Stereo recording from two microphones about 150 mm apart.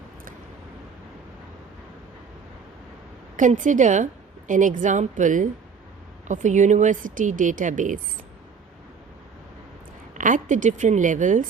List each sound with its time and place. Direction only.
3.3 s a woman's voice: 60° right (ahead or behind)
10.2 s a woman's voice: 60° right (ahead or behind)